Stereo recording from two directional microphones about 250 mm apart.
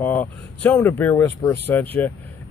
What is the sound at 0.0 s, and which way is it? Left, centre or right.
Speech, centre.